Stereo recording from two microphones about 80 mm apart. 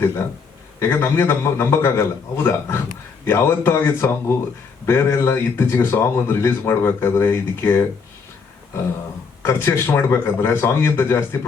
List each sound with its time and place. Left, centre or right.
0.8 s speech: left
9.4 s speech: left